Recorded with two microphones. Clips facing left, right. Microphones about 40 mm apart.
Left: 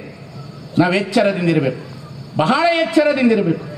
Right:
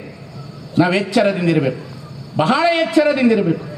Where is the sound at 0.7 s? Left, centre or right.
Centre.